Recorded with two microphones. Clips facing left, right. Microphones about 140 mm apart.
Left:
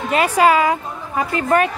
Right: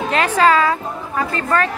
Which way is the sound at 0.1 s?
10° left (ahead or behind).